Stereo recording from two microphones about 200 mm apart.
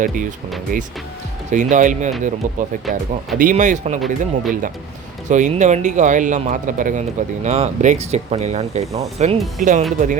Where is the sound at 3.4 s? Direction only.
40° right (ahead or behind).